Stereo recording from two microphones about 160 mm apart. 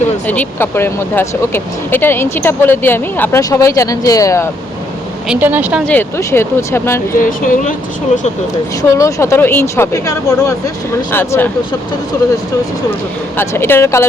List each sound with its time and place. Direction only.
0.3 s speech: 10° left (ahead or behind)
5.3 s a woman's voice: 10° right (ahead or behind)
5.8 s speech: 10° left (ahead or behind)
7.2 s speech: 60° left (ahead or behind)
9.0 s speech: 20° left (ahead or behind)
13.3 s speech: 15° left (ahead or behind)